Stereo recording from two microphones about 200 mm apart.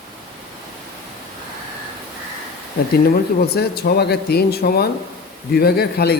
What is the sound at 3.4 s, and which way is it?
A man's voice, 50° left (ahead or behind).